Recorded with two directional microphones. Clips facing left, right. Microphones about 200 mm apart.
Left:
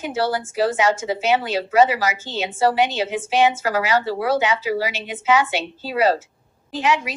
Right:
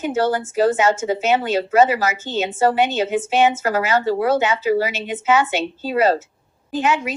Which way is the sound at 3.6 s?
45° right (ahead or behind).